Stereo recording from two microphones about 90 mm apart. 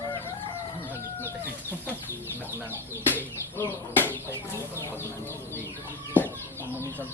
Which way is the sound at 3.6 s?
25° left (ahead or behind).